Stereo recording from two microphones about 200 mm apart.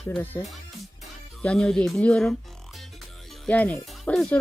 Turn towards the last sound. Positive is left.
turn(degrees=5)  # may be behind; listen again after turning